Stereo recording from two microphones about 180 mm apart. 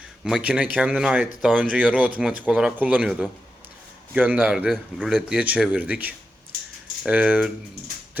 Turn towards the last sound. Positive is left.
turn(degrees=-10)  # may be behind; listen again after turning